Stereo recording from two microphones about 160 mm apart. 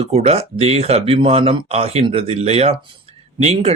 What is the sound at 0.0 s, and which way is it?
Speech, 40° right (ahead or behind).